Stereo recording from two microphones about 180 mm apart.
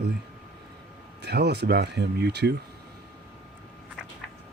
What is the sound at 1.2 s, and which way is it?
Speech, 65° right (ahead or behind).